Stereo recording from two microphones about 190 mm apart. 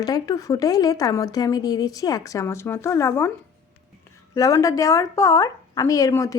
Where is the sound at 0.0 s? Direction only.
20° left (ahead or behind).